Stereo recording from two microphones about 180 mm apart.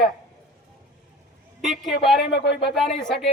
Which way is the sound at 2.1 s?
65° left (ahead or behind).